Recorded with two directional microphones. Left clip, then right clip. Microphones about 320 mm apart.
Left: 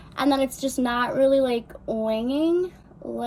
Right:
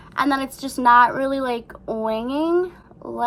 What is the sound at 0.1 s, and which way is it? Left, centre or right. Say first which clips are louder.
A woman's voice: right 1 dB; centre.